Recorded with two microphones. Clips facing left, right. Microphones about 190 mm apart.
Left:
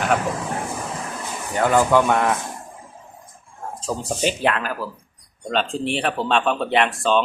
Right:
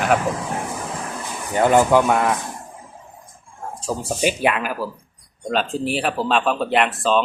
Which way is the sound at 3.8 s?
10° right (ahead or behind).